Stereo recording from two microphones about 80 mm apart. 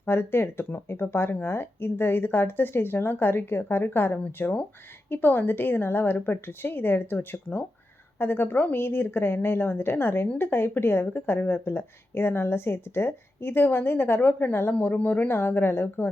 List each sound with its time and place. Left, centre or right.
0.0 s speech: left